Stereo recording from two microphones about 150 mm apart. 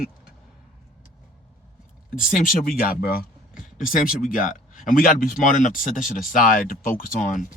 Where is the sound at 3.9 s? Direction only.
70° left (ahead or behind).